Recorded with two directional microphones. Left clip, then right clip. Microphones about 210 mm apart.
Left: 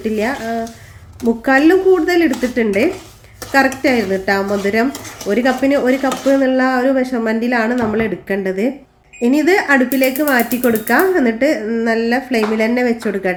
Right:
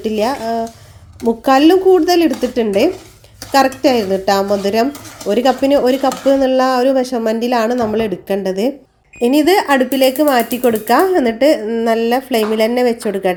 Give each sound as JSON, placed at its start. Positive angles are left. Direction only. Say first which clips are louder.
{"t": 0.0, "sound": "speech", "louder": "right 2 dB", "side_deg": -30}